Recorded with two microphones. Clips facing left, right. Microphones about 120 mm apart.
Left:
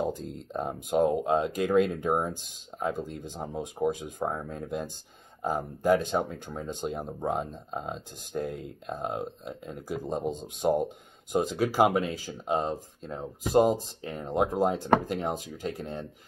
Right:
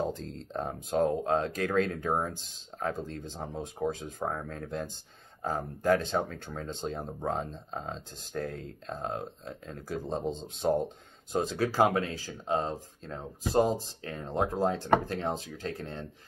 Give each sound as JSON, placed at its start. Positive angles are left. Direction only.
{"t": 0.3, "sound": "speech", "side_deg": 15}